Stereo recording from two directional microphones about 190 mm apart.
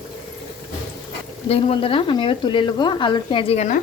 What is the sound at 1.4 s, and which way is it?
Speech, 30° left (ahead or behind).